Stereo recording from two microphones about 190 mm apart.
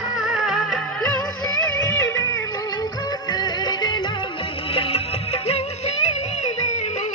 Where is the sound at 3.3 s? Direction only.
20° left (ahead or behind).